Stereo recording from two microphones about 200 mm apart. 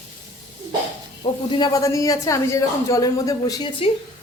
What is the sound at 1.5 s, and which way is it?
Speech, 20° left (ahead or behind).